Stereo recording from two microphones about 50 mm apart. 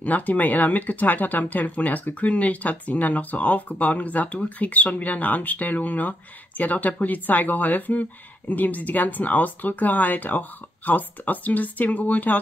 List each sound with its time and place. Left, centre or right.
0.0 s speech: left